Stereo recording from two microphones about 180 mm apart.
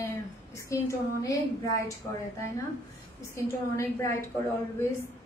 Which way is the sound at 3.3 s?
15° left (ahead or behind).